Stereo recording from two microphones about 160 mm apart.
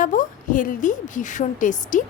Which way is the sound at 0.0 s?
55° left (ahead or behind).